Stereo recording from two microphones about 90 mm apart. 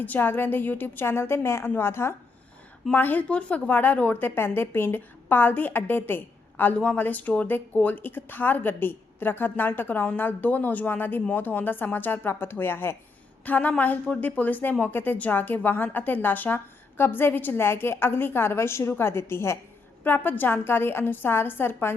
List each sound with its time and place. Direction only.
0.0 s a woman's voice: 20° left (ahead or behind)